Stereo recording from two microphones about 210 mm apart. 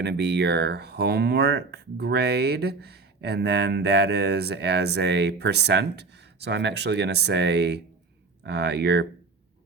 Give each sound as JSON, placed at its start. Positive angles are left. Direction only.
{"t": 0.0, "sound": "speech", "side_deg": -55}